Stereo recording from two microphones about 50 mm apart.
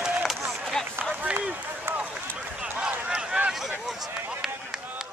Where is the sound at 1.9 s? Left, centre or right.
Right.